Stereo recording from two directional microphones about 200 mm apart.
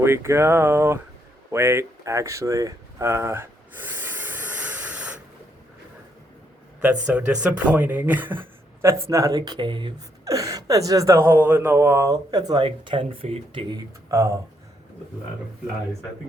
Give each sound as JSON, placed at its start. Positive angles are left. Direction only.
{"t": 0.0, "sound": "speech", "side_deg": -10}
{"t": 1.5, "sound": "a sound", "side_deg": -15}
{"t": 7.0, "sound": "speech", "side_deg": -5}